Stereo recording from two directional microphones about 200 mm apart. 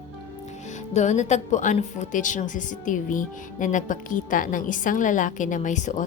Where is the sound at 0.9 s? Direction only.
35° left (ahead or behind).